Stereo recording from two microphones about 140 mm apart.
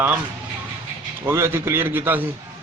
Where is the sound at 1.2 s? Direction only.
15° right (ahead or behind).